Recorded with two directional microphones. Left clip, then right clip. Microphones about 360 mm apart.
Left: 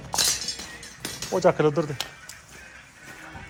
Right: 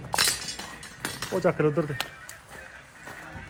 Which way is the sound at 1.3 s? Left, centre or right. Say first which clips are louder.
Left 4 dB; centre.